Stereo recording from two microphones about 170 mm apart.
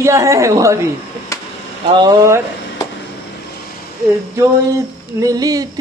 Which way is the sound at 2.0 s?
20° right (ahead or behind).